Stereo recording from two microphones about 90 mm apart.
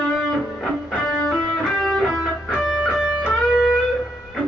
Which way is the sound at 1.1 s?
5° left (ahead or behind).